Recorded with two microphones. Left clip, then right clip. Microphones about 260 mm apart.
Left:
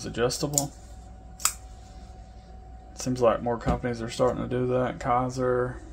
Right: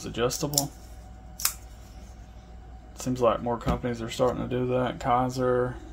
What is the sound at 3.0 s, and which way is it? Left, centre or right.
Speech, centre.